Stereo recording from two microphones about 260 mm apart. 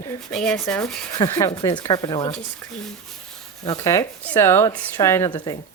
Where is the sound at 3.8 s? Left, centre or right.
Centre.